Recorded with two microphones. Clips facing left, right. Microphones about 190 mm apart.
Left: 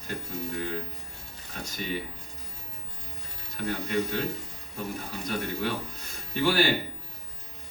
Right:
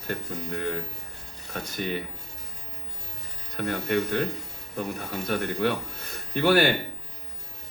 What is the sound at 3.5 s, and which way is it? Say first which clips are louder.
Speech: right 3 dB; 60° right (ahead or behind).